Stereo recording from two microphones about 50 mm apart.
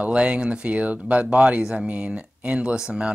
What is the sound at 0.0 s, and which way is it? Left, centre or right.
Speech, centre.